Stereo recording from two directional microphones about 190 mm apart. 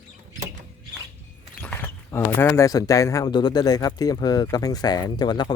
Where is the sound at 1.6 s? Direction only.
10° left (ahead or behind).